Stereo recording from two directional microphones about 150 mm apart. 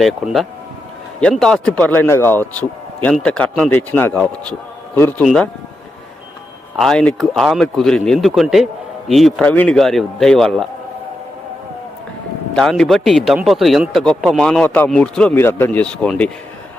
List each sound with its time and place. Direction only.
0.2 s a man's voice: centre (ahead or behind)
5.2 s a man's voice: 5° left (ahead or behind)
6.7 s a man's voice: 5° left (ahead or behind)
12.5 s a man's voice: 5° left (ahead or behind)